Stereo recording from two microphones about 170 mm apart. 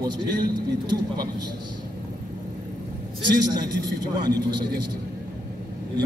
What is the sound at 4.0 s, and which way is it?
A man's voice, 25° right (ahead or behind).